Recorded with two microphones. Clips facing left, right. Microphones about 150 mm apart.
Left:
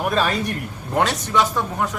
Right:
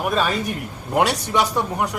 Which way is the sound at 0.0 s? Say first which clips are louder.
Even; centre (ahead or behind).